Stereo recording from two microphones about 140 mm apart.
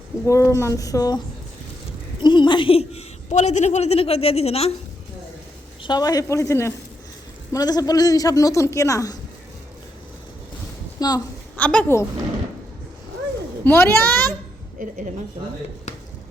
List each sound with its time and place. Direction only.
0.3 s a woman's voice: 20° left (ahead or behind)
2.2 s a woman's voice: 35° left (ahead or behind)
5.8 s a woman's voice: 30° left (ahead or behind)
11.0 s a woman's voice: 25° left (ahead or behind)
11.5 s a child's voice: 10° left (ahead or behind)
13.7 s a child's voice: 15° left (ahead or behind)